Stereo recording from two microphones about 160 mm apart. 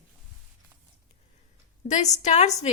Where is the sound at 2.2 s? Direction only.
45° left (ahead or behind).